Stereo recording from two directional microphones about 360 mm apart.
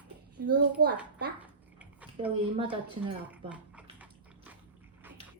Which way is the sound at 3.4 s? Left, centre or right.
Centre.